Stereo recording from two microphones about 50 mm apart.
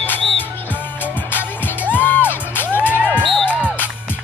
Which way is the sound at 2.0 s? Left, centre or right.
Left.